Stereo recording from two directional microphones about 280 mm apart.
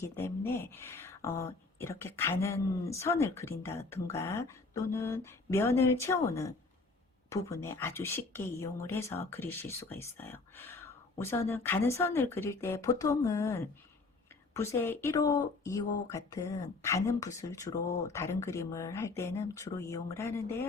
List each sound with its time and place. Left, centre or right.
0.0 s speech: centre